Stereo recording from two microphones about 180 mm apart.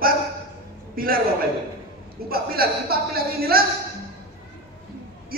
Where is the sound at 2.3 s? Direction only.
55° right (ahead or behind).